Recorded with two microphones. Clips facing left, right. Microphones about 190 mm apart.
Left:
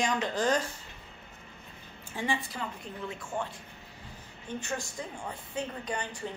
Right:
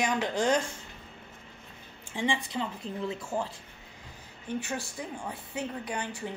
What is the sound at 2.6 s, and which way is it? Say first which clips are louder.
Speech: right 4 dB; 30° right (ahead or behind).